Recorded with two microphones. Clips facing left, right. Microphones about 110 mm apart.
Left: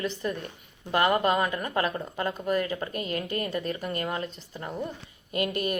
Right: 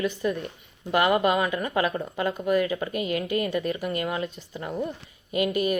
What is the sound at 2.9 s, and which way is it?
Speech, 35° left (ahead or behind).